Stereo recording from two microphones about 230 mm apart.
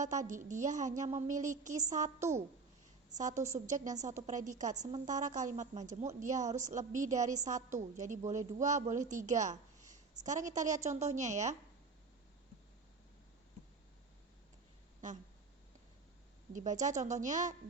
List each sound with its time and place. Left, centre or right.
0.0 s a woman's voice: right
4.8 s a woman's voice: centre
5.0 s a woman's voice: right
16.5 s a woman's voice: right